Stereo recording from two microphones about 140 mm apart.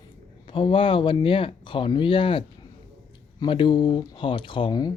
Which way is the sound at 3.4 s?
35° left (ahead or behind).